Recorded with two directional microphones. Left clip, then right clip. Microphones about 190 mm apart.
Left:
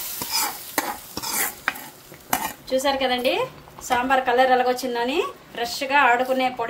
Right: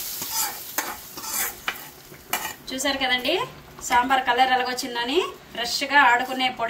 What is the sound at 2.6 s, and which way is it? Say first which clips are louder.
A woman's voice: left 3 dB; 60° left (ahead or behind).